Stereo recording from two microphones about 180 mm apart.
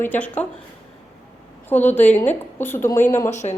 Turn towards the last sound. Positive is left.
turn(degrees=40)  # may be behind; listen again after turning